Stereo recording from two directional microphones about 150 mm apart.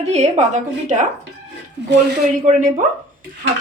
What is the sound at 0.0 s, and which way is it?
A woman's voice, 45° right (ahead or behind).